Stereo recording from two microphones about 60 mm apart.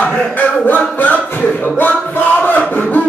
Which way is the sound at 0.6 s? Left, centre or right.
Left.